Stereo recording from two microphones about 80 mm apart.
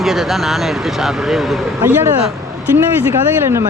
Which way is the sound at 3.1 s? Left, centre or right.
Right.